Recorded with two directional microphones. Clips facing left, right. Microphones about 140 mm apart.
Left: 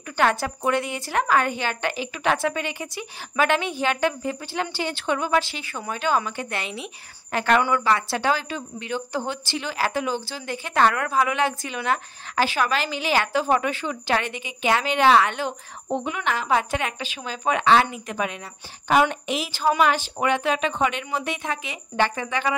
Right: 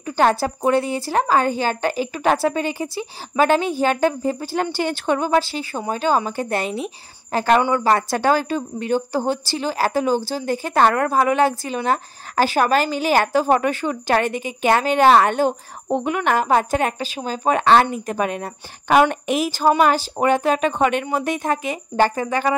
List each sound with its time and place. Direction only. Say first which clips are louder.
0.0 s a woman's voice: right 4 dB; 35° right (ahead or behind)
18.9 s a woman's voice: right 4 dB; 60° right (ahead or behind); by 22.6 s 40° right (ahead or behind)